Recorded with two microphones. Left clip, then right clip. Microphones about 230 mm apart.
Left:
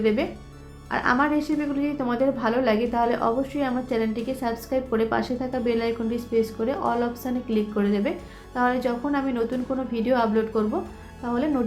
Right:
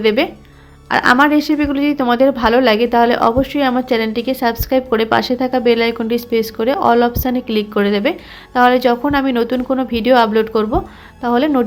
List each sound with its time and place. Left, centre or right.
0.0 s a woman's voice: right